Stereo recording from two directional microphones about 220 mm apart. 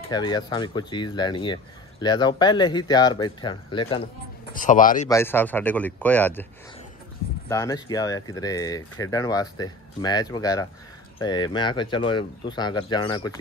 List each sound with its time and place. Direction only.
0.1 s speech: 20° left (ahead or behind)
4.6 s speech: 35° left (ahead or behind)
5.0 s speech: 10° left (ahead or behind)
7.4 s speech: 15° left (ahead or behind)